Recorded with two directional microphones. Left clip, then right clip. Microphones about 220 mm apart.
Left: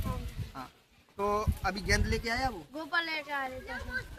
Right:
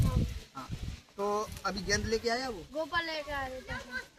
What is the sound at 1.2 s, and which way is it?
Speech, 10° left (ahead or behind).